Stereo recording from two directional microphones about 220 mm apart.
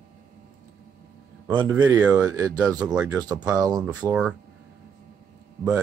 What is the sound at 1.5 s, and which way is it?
Speech, 20° right (ahead or behind).